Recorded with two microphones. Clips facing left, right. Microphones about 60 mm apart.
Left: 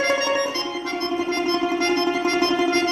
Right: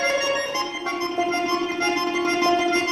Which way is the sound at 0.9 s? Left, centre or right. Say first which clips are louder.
Right 1 dB; centre.